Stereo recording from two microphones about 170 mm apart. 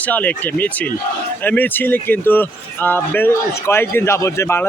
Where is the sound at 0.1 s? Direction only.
10° left (ahead or behind).